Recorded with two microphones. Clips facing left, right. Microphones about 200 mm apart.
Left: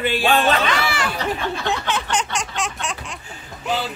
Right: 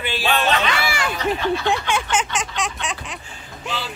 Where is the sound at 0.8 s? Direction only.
10° right (ahead or behind).